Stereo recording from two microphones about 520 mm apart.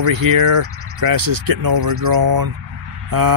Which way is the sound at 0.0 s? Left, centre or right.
Right.